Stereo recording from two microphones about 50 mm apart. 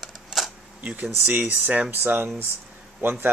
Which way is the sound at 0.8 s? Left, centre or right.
Right.